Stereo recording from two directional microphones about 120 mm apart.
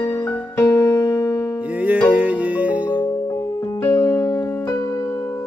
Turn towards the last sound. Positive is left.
turn(degrees=25)  # may be behind; listen again after turning